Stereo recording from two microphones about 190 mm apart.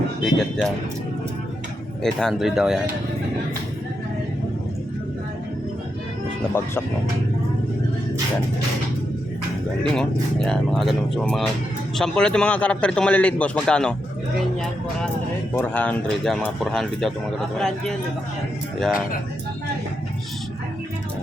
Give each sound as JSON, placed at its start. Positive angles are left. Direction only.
{"t": 0.3, "sound": "a man's voice", "side_deg": 0}
{"t": 2.0, "sound": "a man's voice", "side_deg": 0}
{"t": 9.8, "sound": "a man's voice", "side_deg": 5}
{"t": 15.5, "sound": "a man's voice", "side_deg": 10}